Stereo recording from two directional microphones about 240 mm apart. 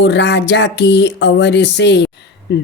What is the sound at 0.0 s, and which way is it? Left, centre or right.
Speech, left.